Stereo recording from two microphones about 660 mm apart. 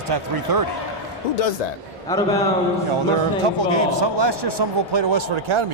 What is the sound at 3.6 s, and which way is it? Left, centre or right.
A man's voice, right.